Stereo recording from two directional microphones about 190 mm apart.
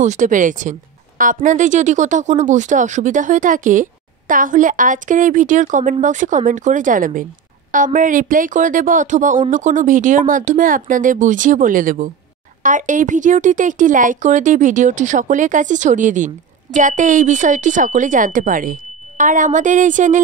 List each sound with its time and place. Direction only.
0.0 s a woman's voice: 40° right (ahead or behind)